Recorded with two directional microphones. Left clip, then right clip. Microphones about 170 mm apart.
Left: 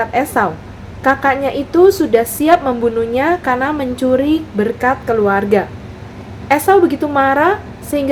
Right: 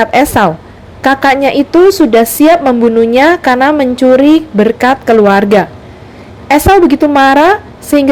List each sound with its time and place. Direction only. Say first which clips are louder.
0.0 s a woman's voice: right 7 dB; 55° right (ahead or behind)